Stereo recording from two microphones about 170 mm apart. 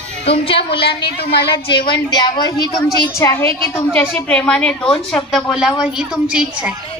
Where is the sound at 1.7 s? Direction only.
25° left (ahead or behind); by 6.4 s 5° right (ahead or behind).